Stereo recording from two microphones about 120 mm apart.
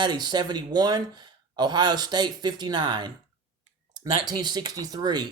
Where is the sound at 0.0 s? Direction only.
35° right (ahead or behind).